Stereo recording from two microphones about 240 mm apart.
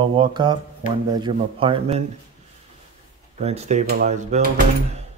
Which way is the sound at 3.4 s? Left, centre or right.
Right.